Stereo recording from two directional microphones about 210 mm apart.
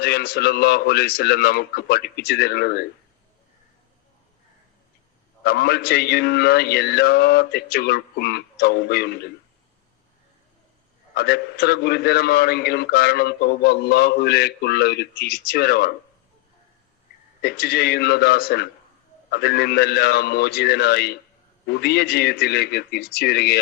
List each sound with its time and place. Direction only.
0.0 s a man's voice: 50° left (ahead or behind)
5.4 s a man's voice: 50° left (ahead or behind)
11.1 s a man's voice: 50° left (ahead or behind)
17.4 s a man's voice: 50° left (ahead or behind)